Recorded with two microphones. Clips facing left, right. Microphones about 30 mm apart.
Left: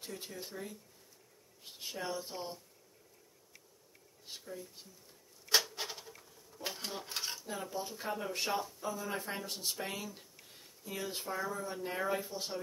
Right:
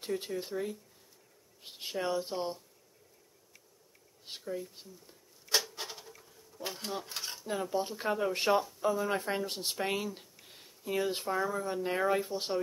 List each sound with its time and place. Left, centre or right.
0.0 s speech: right
4.2 s speech: right
5.5 s a sound: centre
7.3 s dishes: right
7.7 s speech: right